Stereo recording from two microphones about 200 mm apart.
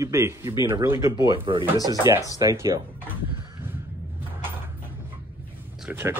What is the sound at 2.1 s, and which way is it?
Speech, 20° left (ahead or behind).